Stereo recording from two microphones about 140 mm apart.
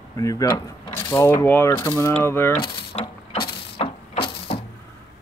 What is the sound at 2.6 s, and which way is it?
Mechanisms, 45° left (ahead or behind).